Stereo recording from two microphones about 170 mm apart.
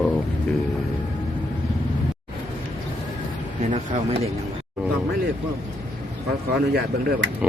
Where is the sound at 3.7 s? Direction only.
40° right (ahead or behind).